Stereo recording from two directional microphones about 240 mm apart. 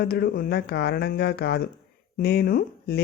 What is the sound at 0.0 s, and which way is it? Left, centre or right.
Speech, left.